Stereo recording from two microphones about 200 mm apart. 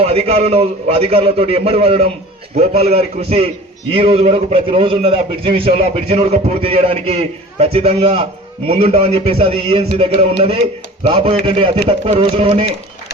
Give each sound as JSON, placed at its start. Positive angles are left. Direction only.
{"t": 0.0, "sound": "a man's voice", "side_deg": -30}